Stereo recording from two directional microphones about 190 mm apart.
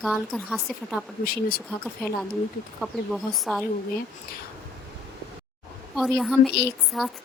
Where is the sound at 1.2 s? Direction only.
50° left (ahead or behind).